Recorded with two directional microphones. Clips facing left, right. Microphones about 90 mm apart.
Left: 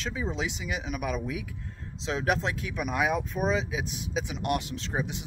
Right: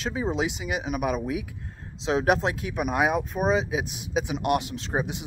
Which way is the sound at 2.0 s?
20° right (ahead or behind).